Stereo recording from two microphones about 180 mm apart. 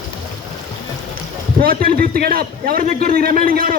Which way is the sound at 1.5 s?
55° right (ahead or behind).